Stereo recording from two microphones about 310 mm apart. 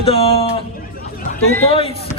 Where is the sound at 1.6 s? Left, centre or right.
Centre.